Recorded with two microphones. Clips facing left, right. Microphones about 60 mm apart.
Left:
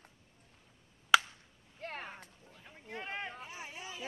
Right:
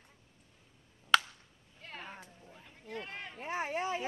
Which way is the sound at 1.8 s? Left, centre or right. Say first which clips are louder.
Left 4 dB; left.